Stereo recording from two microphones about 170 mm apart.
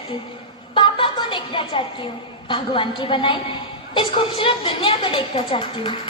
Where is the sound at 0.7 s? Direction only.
30° left (ahead or behind).